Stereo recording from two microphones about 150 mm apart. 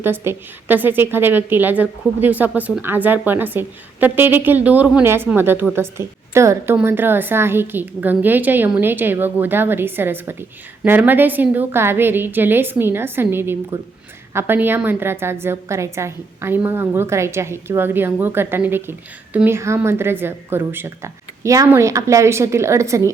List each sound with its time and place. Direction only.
0.0 s a woman's voice: 15° right (ahead or behind)